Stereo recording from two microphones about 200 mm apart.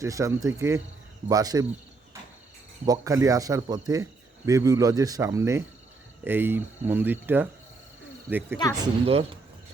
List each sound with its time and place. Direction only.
0.0 s cricket: 15° right (ahead or behind)
2.8 s cricket: 15° right (ahead or behind)
9.0 s speech: 30° right (ahead or behind)